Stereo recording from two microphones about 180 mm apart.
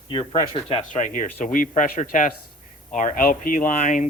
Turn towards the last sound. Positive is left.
turn(degrees=45)  # may be behind; listen again after turning